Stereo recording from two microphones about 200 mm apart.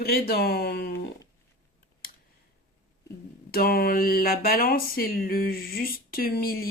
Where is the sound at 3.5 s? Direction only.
50° left (ahead or behind).